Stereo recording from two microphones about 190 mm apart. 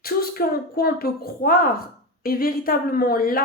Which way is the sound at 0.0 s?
50° left (ahead or behind).